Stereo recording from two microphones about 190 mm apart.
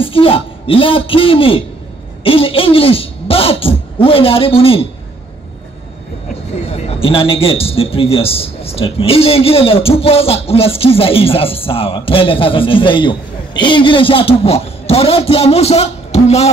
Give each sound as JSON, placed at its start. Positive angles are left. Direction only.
{"t": 0.0, "sound": "a man's voice", "side_deg": 30}
{"t": 6.7, "sound": "a man's voice", "side_deg": 30}